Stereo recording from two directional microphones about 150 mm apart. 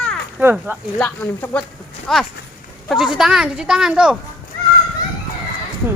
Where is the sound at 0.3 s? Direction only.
5° right (ahead or behind).